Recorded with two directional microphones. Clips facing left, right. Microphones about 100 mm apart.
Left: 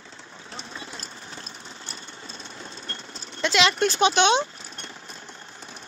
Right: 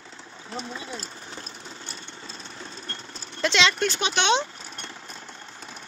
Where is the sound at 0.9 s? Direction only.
30° right (ahead or behind).